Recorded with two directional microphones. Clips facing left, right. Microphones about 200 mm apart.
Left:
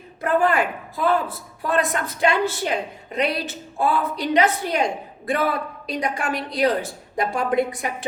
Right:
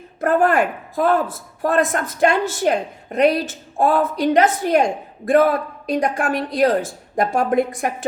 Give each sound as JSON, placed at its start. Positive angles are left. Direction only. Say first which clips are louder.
{"t": 0.2, "sound": "speech", "louder": "right 3 dB", "side_deg": -50}